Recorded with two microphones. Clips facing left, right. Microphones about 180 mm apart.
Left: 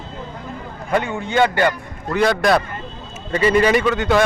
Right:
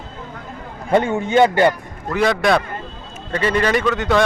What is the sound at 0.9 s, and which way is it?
Speech, 25° right (ahead or behind).